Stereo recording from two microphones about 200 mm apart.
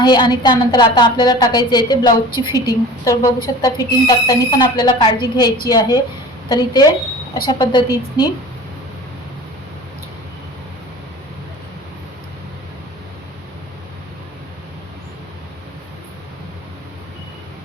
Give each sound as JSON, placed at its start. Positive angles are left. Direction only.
{"t": 0.0, "sound": "a woman's voice", "side_deg": 20}